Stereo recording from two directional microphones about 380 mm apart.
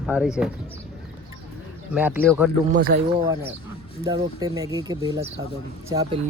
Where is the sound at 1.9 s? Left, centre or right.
Centre.